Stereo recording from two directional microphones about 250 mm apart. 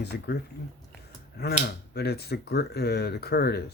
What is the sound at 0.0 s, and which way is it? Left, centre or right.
Speech, left.